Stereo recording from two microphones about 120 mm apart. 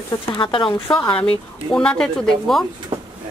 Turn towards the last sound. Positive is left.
turn(degrees=-45)  # may be behind; listen again after turning